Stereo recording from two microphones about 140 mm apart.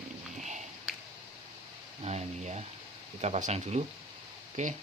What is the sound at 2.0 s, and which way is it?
Speech, 50° right (ahead or behind).